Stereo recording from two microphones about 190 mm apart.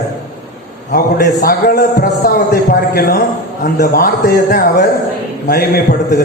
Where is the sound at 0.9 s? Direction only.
50° left (ahead or behind).